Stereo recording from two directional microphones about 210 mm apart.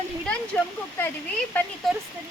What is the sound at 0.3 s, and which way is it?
Speech, 5° left (ahead or behind).